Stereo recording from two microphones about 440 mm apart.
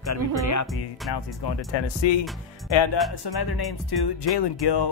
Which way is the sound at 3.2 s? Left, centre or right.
Left.